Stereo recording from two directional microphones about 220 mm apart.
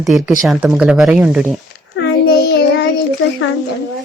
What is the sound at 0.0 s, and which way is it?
Speech, centre (ahead or behind).